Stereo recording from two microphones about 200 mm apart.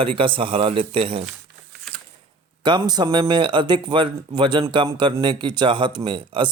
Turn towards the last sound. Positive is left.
turn(degrees=-25)  # may be behind; listen again after turning